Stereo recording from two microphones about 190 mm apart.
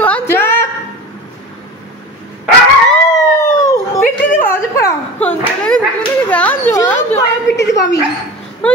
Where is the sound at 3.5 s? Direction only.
20° left (ahead or behind).